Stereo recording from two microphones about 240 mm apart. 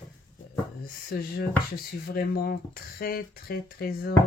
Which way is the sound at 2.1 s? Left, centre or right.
Left.